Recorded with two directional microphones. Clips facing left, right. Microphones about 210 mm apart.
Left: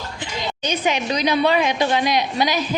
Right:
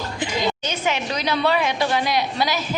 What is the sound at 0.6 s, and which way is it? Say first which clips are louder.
A woman's voice: left 3 dB; 15° left (ahead or behind).